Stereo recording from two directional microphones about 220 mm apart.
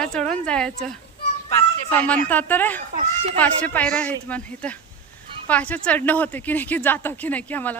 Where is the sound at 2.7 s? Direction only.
35° right (ahead or behind).